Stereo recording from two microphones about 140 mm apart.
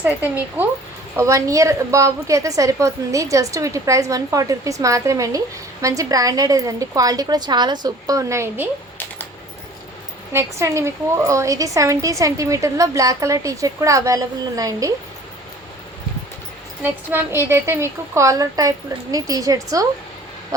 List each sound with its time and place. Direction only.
0.0 s a woman's voice: 10° right (ahead or behind)
10.3 s a woman's voice: 20° right (ahead or behind)
16.8 s a woman's voice: 15° right (ahead or behind)
20.5 s owl: 25° right (ahead or behind)